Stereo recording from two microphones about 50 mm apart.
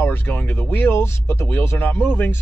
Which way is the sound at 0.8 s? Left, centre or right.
Left.